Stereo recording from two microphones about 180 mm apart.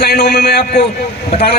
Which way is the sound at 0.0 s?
65° left (ahead or behind).